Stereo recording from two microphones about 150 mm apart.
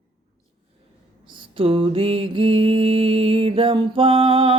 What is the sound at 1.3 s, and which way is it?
Mantra, 35° right (ahead or behind).